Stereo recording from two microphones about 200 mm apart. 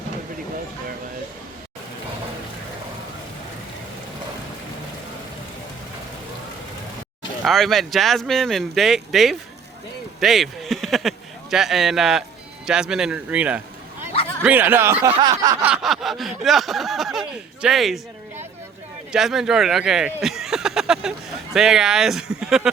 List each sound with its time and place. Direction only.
7.4 s snicker: centre (ahead or behind)
10.2 s speech: centre (ahead or behind)
11.5 s snicker: centre (ahead or behind)
14.4 s speech: 10° right (ahead or behind)
15.1 s snicker: 20° right (ahead or behind)
15.6 s snicker: centre (ahead or behind)
19.1 s speech: centre (ahead or behind)
21.5 s snicker: 5° right (ahead or behind)